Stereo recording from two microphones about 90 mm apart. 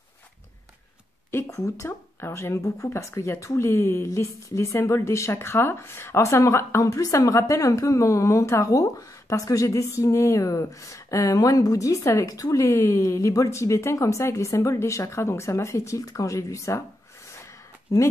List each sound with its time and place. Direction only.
1.3 s speech: 30° left (ahead or behind)
17.9 s speech: 35° left (ahead or behind)